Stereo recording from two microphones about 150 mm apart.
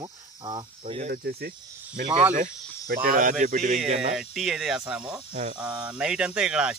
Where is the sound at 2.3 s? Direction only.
65° right (ahead or behind).